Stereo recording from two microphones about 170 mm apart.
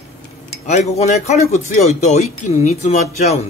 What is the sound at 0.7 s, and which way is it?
Speech, 40° left (ahead or behind).